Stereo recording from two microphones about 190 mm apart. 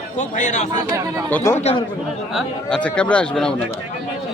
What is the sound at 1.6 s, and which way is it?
Speech, 30° left (ahead or behind).